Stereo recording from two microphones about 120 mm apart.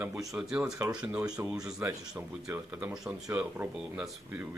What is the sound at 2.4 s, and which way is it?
Speech, 25° right (ahead or behind).